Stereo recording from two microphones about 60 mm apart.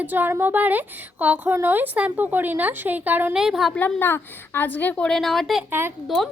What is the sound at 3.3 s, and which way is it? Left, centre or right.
Speech, centre.